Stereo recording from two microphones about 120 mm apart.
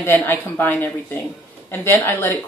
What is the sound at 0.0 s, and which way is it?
Speech, 20° left (ahead or behind).